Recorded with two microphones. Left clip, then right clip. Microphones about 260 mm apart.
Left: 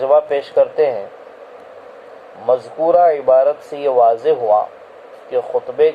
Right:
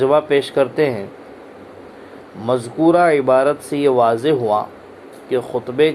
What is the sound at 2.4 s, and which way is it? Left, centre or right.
Speech, right.